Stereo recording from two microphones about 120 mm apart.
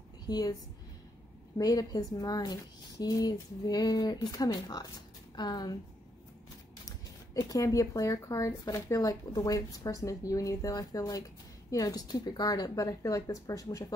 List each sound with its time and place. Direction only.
0.3 s speech: 35° left (ahead or behind)
1.6 s speech: 30° left (ahead or behind)
7.3 s speech: 30° left (ahead or behind)